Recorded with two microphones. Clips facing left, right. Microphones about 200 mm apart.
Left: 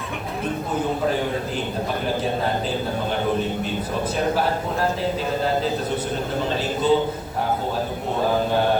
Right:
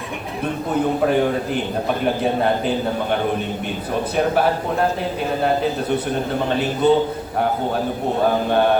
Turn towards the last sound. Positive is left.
turn(degrees=-60)  # may be behind; listen again after turning